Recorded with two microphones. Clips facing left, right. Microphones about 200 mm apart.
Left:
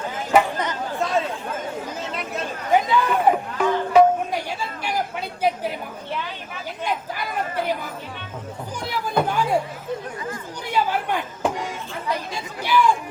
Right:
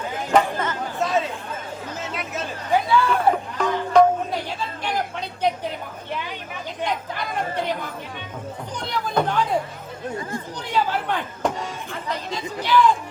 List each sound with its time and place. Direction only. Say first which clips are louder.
0.3 s chatter: left 1 dB; 15° left (ahead or behind)
0.9 s chatter: even; centre (ahead or behind)
2.7 s music: even; 15° left (ahead or behind)
6.8 s chatter: even; 5° left (ahead or behind)
8.8 s a sound: even; 5° left (ahead or behind)
10.7 s chatter: left 1 dB; 10° left (ahead or behind)